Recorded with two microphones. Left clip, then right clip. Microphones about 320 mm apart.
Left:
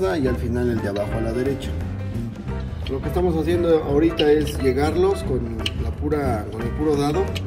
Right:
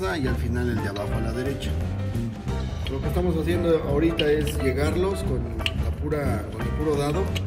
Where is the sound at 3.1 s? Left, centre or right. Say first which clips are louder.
Left 5 dB; centre.